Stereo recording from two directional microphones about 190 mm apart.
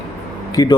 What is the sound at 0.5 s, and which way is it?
Speech, 20° left (ahead or behind).